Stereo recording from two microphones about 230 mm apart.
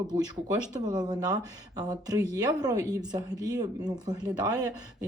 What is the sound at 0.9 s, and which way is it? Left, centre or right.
Speech, centre.